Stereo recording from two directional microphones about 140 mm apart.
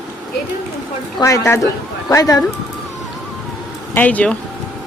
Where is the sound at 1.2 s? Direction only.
20° left (ahead or behind).